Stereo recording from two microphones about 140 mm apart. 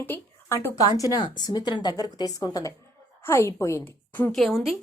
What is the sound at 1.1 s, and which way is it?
A woman's voice, 30° left (ahead or behind).